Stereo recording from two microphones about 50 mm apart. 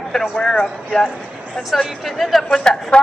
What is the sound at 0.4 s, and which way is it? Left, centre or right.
Speech, centre.